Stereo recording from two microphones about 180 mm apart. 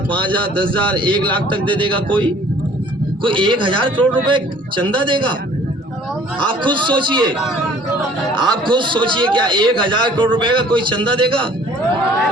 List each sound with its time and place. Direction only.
0.9 s a man's voice: 25° right (ahead or behind)
3.2 s a man's voice: 25° right (ahead or behind)
6.6 s a man's voice: 25° right (ahead or behind)
8.4 s a man's voice: 25° right (ahead or behind)